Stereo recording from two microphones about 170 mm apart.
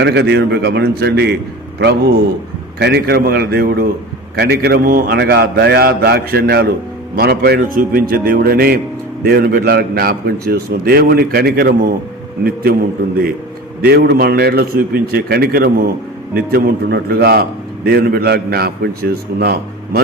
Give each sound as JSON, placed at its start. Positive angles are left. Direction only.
{"t": 0.0, "sound": "a man's voice", "side_deg": -75}
{"t": 2.7, "sound": "a man's voice", "side_deg": -70}
{"t": 13.8, "sound": "a man's voice", "side_deg": -70}